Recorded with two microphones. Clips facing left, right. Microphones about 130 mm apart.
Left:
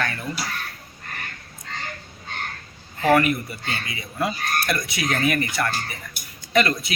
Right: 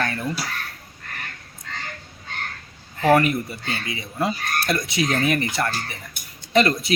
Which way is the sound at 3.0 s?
25° right (ahead or behind).